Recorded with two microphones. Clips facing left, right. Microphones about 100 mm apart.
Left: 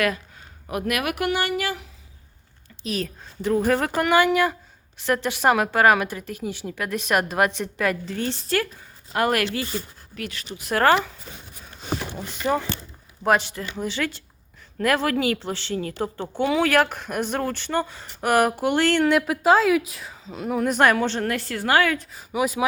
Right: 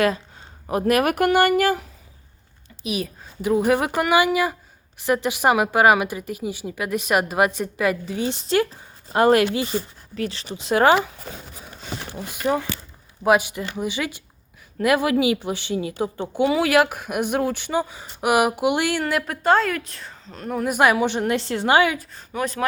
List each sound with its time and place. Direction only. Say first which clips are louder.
0.7 s speech: right 6 dB; 35° right (ahead or behind)
2.8 s a woman's voice: right 1 dB; 10° right (ahead or behind)
10.2 s speech: right 6 dB; 30° right (ahead or behind)
12.1 s a woman's voice: right 3 dB; 5° right (ahead or behind)
20.7 s a woman's voice: right 2 dB; 10° right (ahead or behind)
22.1 s speech: left 2 dB; 10° left (ahead or behind)